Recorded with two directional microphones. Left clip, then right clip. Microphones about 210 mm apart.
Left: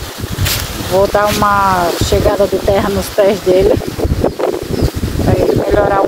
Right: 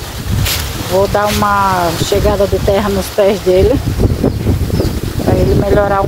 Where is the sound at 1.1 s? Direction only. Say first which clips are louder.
Left 1 dB; 15° left (ahead or behind).